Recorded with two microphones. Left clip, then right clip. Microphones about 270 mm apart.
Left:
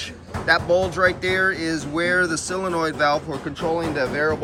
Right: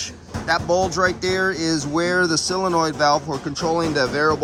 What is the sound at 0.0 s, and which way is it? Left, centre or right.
Speech, centre.